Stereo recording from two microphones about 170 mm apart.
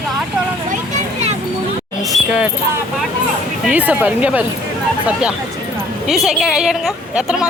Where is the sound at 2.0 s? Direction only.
5° right (ahead or behind).